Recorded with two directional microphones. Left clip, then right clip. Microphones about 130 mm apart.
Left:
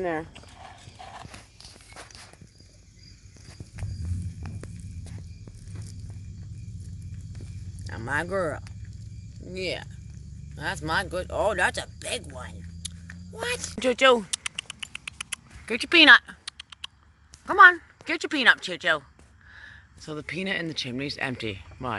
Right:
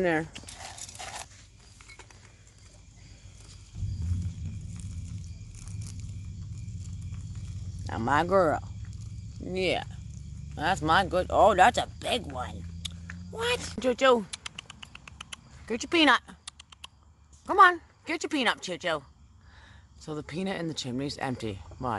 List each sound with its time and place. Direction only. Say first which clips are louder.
0.0 s speech: right 2 dB; 50° right (ahead or behind)
0.7 s clip-clop: right 3 dB; 10° right (ahead or behind)
7.8 s speech: right 3 dB; 40° right (ahead or behind)
9.5 s speech: right 3 dB; 60° right (ahead or behind)
13.7 s rodents: left 4 dB; centre (ahead or behind)
15.6 s speech: left 7 dB; 5° right (ahead or behind)